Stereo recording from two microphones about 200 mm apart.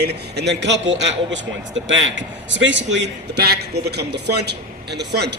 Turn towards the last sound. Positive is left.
turn(degrees=-55)  # may be behind; listen again after turning